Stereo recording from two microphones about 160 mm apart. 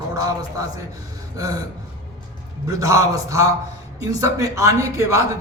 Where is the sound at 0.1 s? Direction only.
20° right (ahead or behind).